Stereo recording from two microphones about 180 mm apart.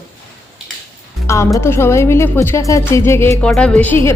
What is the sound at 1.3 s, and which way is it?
A woman's voice, 15° left (ahead or behind).